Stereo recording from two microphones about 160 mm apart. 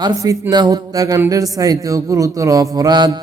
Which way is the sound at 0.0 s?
20° right (ahead or behind).